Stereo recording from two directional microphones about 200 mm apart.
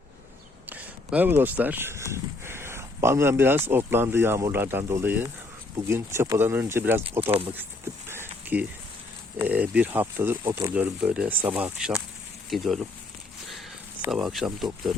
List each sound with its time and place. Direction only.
0.7 s speech: 10° right (ahead or behind)
7.2 s speech: 30° right (ahead or behind)
8.0 s a sound: 10° right (ahead or behind)
9.4 s speech: 10° right (ahead or behind)
14.0 s speech: 5° right (ahead or behind)